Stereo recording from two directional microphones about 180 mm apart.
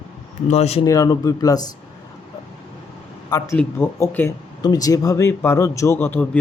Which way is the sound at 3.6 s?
10° left (ahead or behind).